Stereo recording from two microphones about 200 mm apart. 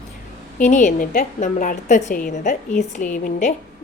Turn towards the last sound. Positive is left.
turn(degrees=40)  # may be behind; listen again after turning